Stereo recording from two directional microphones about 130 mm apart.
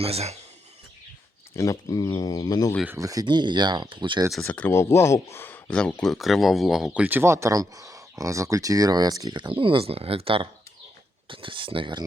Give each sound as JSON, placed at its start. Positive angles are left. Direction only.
{"t": 0.0, "sound": "speech", "side_deg": -50}
{"t": 1.5, "sound": "speech", "side_deg": 25}
{"t": 3.0, "sound": "speech", "side_deg": -25}
{"t": 4.4, "sound": "speech", "side_deg": 15}